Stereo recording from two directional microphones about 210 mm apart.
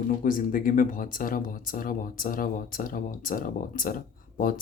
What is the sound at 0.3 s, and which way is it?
Speech, 40° left (ahead or behind).